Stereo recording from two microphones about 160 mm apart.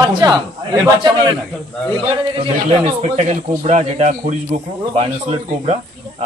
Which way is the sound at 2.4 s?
40° right (ahead or behind).